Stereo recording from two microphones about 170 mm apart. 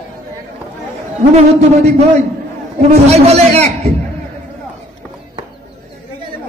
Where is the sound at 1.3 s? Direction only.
40° right (ahead or behind).